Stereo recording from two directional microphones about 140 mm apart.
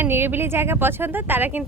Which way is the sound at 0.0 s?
15° right (ahead or behind).